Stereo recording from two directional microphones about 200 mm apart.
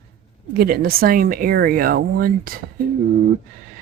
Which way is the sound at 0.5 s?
50° right (ahead or behind).